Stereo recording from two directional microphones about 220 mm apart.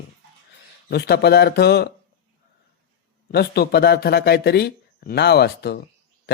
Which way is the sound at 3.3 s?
45° left (ahead or behind).